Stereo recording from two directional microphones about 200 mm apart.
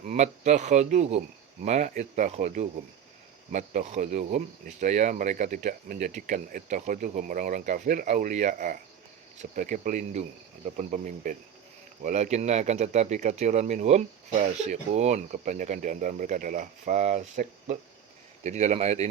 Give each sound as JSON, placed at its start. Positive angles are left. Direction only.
{"t": 0.1, "sound": "speech", "side_deg": -35}